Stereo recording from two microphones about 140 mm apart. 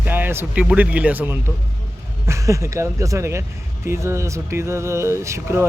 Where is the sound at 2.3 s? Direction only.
20° right (ahead or behind).